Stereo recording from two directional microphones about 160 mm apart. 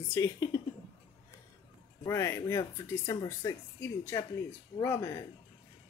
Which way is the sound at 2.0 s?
15° left (ahead or behind).